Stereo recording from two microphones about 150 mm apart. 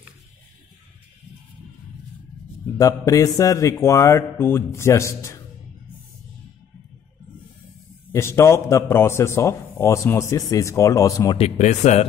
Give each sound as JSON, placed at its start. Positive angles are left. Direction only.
{"t": 2.8, "sound": "a man's voice", "side_deg": 20}
{"t": 8.1, "sound": "a man's voice", "side_deg": 15}
{"t": 11.3, "sound": "speech", "side_deg": 45}